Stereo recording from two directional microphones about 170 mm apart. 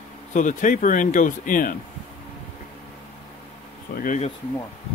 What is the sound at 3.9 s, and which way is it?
Bee, 55° left (ahead or behind).